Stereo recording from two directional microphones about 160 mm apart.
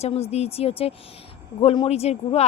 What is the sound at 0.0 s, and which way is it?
A woman's voice, 40° left (ahead or behind).